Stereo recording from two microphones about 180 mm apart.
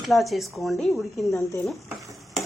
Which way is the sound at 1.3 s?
15° left (ahead or behind).